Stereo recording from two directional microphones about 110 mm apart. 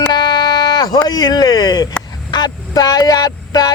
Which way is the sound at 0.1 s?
40° left (ahead or behind).